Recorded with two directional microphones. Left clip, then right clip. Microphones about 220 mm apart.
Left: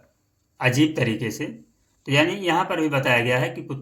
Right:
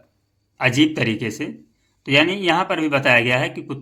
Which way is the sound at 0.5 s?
25° right (ahead or behind).